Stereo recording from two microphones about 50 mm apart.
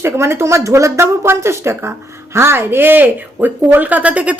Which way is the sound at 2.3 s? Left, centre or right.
Right.